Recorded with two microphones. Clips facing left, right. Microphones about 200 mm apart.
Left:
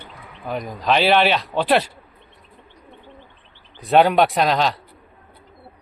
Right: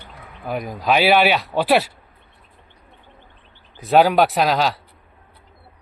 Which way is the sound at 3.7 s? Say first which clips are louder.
Even; centre (ahead or behind).